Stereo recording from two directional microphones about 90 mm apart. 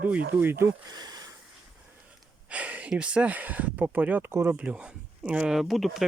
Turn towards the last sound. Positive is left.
turn(degrees=0)  # may be behind; listen again after turning